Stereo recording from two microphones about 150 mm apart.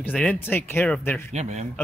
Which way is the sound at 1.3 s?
50° right (ahead or behind).